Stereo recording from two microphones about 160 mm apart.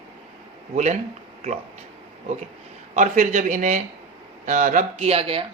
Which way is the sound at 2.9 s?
50° right (ahead or behind).